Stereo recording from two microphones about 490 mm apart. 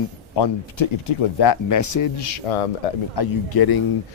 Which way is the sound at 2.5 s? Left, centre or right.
Left.